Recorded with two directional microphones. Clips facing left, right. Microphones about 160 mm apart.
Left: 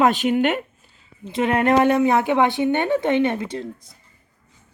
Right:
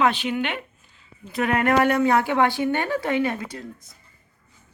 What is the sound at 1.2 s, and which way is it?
A woman's voice, 25° left (ahead or behind).